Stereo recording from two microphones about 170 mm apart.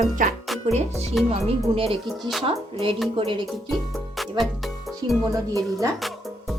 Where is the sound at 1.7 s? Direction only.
35° right (ahead or behind).